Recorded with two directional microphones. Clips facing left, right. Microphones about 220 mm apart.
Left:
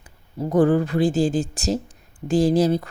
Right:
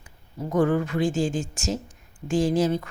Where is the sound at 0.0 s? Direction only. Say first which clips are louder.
Left 6 dB; 35° left (ahead or behind).